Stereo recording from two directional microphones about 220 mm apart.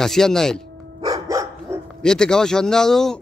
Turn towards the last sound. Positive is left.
turn(degrees=0)  # may be behind; listen again after turning